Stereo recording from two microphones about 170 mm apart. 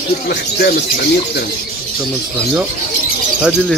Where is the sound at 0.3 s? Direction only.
70° left (ahead or behind).